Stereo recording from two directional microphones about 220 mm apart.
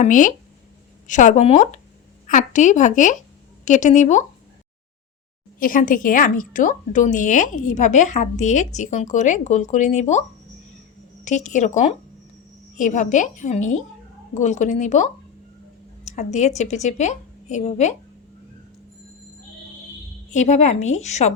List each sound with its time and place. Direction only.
0.0 s a woman's voice: 35° left (ahead or behind)
5.5 s a woman's voice: 40° left (ahead or behind)
11.3 s a woman's voice: 35° left (ahead or behind)
20.3 s a woman's voice: 30° left (ahead or behind)